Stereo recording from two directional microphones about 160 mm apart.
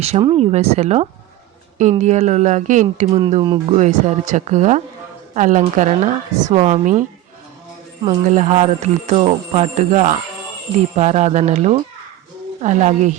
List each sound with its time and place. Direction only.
0.0 s speech: 35° right (ahead or behind)
3.2 s speech: 35° right (ahead or behind)
3.8 s speech: 50° right (ahead or behind)
8.2 s speech: 50° right (ahead or behind)